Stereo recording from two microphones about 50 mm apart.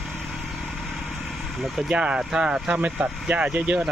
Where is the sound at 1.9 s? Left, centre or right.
Right.